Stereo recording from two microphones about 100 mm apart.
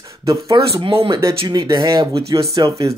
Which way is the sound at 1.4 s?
45° right (ahead or behind).